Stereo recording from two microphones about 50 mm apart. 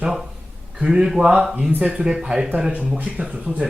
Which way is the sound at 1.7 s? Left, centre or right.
Right.